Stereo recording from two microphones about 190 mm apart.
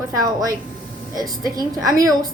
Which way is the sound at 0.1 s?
20° right (ahead or behind).